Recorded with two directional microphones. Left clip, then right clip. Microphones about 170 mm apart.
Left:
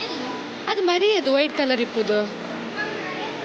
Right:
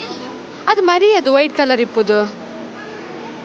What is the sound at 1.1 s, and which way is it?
Speech, 20° right (ahead or behind).